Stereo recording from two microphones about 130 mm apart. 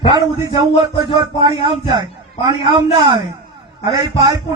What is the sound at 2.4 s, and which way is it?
Speech, 30° right (ahead or behind).